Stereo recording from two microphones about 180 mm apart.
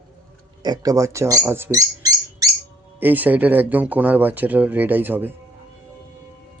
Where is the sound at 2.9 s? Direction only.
10° right (ahead or behind).